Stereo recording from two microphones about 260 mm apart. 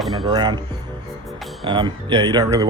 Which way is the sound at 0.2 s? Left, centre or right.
Centre.